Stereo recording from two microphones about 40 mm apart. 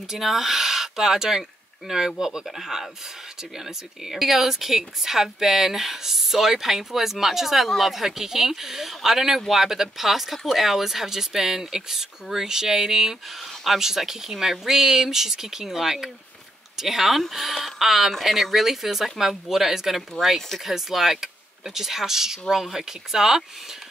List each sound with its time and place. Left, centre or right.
0.1 s a woman's voice: centre
20.3 s speech: centre
20.6 s a woman's voice: centre